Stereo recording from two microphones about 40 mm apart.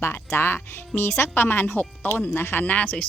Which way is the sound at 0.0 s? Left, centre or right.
Left.